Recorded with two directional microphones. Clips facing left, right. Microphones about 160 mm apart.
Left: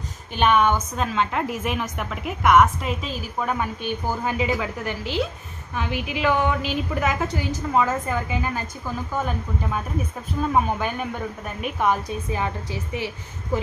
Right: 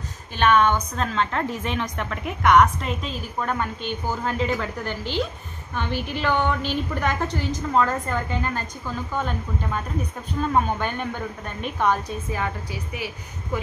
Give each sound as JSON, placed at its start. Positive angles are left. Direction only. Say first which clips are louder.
{"t": 0.4, "sound": "a woman's voice", "louder": "even", "side_deg": 10}
{"t": 12.3, "sound": "a woman's voice", "louder": "left 1 dB", "side_deg": 20}